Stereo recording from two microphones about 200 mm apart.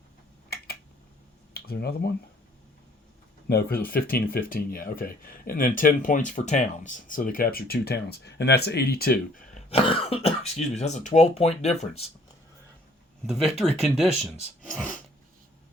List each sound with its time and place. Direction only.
1.5 s speech: 50° left (ahead or behind)
3.5 s speech: 50° left (ahead or behind)
9.6 s speech: 30° left (ahead or behind)
13.2 s speech: centre (ahead or behind)